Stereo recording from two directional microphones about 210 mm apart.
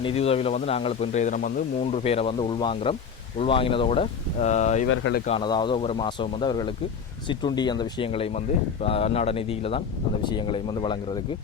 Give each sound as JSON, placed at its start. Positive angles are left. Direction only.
{"t": 0.0, "sound": "speech", "side_deg": 30}
{"t": 4.9, "sound": "speech", "side_deg": 60}
{"t": 5.2, "sound": "speech", "side_deg": 25}